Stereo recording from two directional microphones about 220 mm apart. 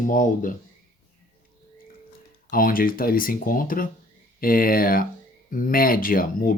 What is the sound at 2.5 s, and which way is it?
Speech, 40° left (ahead or behind).